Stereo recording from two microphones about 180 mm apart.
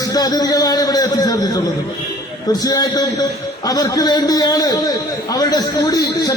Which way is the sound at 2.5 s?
20° left (ahead or behind).